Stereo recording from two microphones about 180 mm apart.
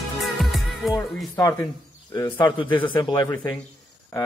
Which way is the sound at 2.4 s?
30° left (ahead or behind).